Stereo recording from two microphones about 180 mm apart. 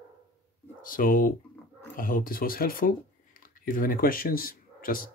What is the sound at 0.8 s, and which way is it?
Speech, 50° left (ahead or behind).